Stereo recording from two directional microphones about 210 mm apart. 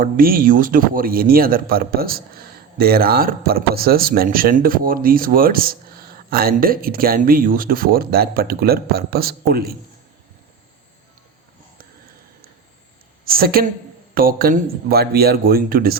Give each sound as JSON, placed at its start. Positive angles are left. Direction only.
{"t": 0.0, "sound": "a man's voice", "side_deg": -45}
{"t": 13.2, "sound": "a man's voice", "side_deg": -45}